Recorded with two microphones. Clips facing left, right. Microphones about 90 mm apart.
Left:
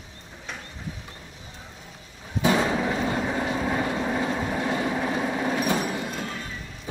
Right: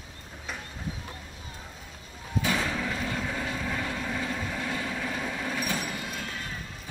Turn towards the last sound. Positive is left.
turn(degrees=35)  # may be behind; listen again after turning